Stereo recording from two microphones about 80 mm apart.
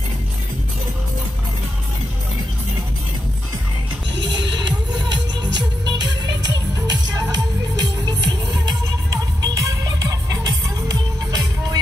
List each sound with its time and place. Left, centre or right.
4.2 s music: right